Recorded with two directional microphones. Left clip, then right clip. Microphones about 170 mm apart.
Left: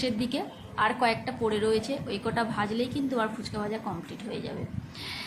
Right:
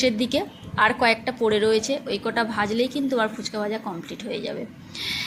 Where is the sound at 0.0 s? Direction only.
20° right (ahead or behind).